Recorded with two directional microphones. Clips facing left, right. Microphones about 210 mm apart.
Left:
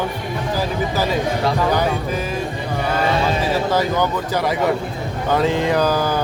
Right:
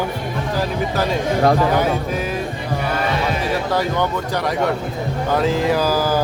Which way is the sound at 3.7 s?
Centre (ahead or behind).